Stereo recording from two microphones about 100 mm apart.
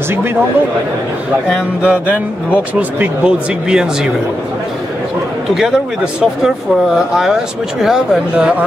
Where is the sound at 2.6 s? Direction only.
15° right (ahead or behind).